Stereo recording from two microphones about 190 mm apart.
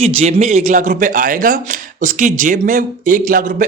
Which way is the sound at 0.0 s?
35° right (ahead or behind).